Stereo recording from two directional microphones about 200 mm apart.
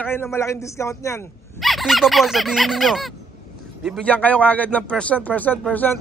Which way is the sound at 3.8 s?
Centre (ahead or behind).